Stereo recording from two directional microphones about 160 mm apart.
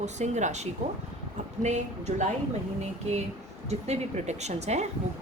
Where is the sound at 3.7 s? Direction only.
45° right (ahead or behind).